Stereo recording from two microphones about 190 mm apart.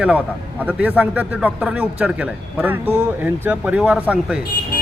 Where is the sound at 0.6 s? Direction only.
10° right (ahead or behind).